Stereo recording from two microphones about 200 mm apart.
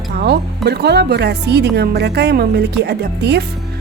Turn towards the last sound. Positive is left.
turn(degrees=-55)  # may be behind; listen again after turning